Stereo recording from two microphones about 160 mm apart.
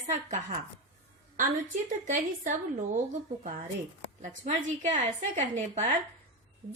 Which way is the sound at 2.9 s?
55° right (ahead or behind).